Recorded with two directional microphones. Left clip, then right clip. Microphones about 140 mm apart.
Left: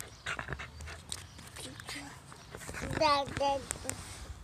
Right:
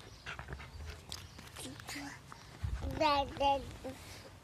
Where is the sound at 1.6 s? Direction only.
15° right (ahead or behind).